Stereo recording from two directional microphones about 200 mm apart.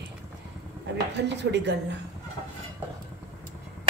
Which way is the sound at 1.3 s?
60° right (ahead or behind).